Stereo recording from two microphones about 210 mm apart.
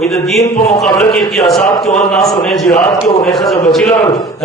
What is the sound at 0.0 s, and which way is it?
A man's voice, centre (ahead or behind).